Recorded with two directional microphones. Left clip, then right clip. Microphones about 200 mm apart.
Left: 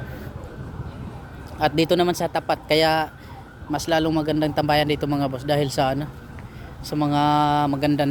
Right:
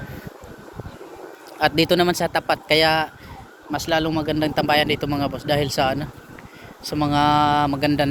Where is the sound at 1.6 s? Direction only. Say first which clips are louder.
Right 2 dB; 5° left (ahead or behind).